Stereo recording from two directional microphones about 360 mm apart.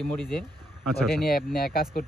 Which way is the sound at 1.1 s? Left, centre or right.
Left.